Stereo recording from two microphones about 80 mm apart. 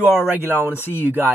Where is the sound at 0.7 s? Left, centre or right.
Left.